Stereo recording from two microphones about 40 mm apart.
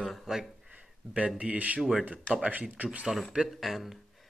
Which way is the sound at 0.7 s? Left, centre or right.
Right.